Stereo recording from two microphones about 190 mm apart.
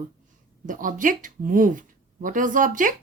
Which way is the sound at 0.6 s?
45° right (ahead or behind).